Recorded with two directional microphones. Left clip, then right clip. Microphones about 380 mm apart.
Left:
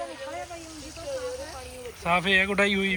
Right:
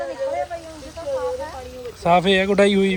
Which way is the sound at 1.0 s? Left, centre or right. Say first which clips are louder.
Right 9 dB; right.